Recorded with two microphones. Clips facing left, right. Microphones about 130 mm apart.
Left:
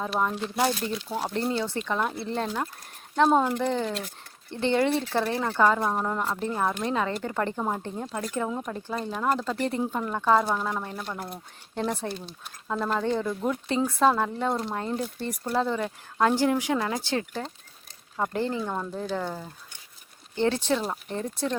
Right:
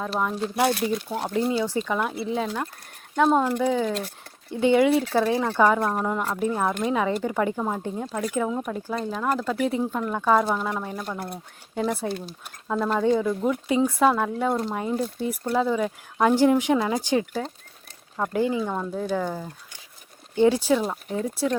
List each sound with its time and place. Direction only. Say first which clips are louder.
0.2 s speech: right 1 dB; centre (ahead or behind)
0.5 s speech: right 5 dB; 60° right (ahead or behind)
1.3 s speech: right 5 dB; 5° right (ahead or behind)
7.8 s speech: right 4 dB; 10° right (ahead or behind)